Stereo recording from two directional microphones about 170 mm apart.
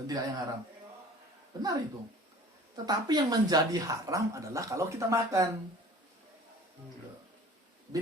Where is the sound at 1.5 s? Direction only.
20° right (ahead or behind).